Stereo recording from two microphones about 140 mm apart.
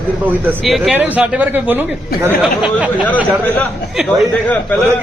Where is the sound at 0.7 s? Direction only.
Centre (ahead or behind).